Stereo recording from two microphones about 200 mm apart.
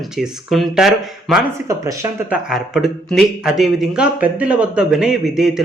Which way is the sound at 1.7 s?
15° right (ahead or behind).